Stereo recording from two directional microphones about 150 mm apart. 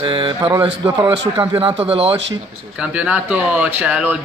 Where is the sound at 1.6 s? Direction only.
40° right (ahead or behind).